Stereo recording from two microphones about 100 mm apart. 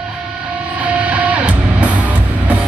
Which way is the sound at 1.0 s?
15° right (ahead or behind).